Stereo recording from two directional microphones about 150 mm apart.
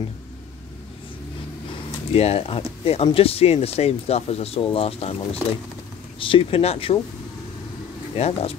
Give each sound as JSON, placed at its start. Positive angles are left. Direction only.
{"t": 2.1, "sound": "speech", "side_deg": 40}
{"t": 8.2, "sound": "speech", "side_deg": 40}